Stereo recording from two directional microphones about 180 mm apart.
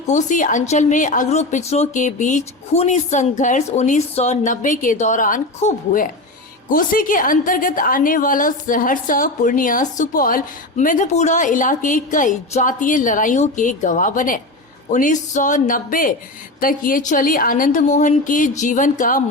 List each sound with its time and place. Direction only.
0.1 s a woman's voice: 45° left (ahead or behind)